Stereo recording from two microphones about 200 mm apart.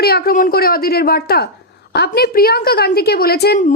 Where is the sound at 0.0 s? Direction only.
50° left (ahead or behind).